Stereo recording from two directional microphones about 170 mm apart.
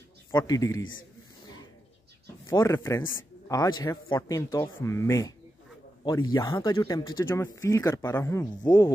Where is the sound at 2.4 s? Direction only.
20° left (ahead or behind).